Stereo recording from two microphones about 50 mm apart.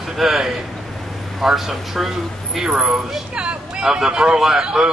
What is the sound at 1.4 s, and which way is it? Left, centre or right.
A man's voice, centre.